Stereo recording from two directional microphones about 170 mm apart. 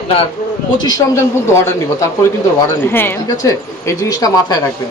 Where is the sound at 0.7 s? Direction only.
25° left (ahead or behind).